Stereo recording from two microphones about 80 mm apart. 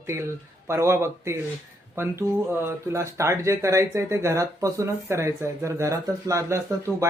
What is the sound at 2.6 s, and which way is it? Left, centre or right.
Speech, right.